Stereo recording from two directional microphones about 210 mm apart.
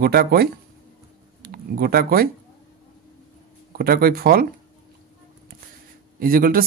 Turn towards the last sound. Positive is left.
turn(degrees=-45)  # may be behind; listen again after turning